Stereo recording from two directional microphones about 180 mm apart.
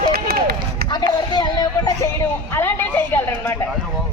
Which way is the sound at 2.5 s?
10° left (ahead or behind).